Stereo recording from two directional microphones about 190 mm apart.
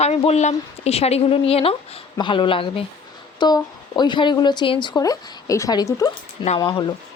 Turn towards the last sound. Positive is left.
turn(degrees=25)  # may be behind; listen again after turning